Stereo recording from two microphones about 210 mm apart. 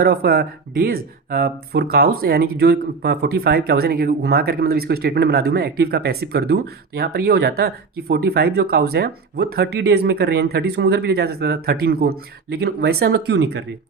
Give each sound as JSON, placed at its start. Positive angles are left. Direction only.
{"t": 0.0, "sound": "speech", "side_deg": -50}